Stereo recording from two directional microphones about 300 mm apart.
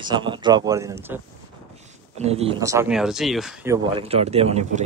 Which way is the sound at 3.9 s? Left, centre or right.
Centre.